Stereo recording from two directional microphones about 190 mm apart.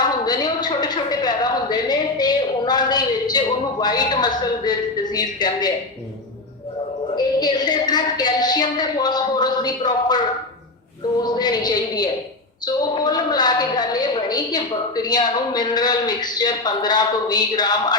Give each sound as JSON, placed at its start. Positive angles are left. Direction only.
{"t": 0.0, "sound": "a sound", "side_deg": 20}
{"t": 7.3, "sound": "a woman's voice", "side_deg": 20}
{"t": 11.2, "sound": "a woman's voice", "side_deg": 20}